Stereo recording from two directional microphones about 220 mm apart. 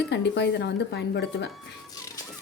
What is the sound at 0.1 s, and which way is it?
Speech, 50° left (ahead or behind).